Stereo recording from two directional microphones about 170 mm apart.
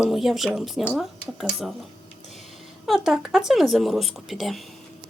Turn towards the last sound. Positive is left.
turn(degrees=0)  # may be behind; listen again after turning